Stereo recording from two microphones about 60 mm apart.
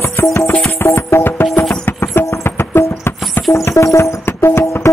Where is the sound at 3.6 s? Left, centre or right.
Left.